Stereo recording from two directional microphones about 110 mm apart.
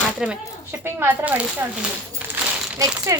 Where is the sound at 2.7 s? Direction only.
30° right (ahead or behind).